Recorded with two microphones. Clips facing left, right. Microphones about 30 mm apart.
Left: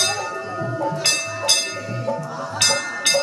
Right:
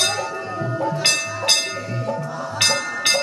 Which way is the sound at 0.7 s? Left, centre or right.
Centre.